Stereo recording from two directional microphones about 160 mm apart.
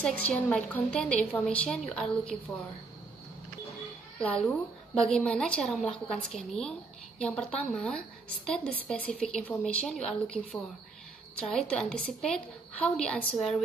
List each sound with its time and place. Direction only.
0.0 s a woman's voice: 5° left (ahead or behind)
4.2 s a woman's voice: 5° left (ahead or behind)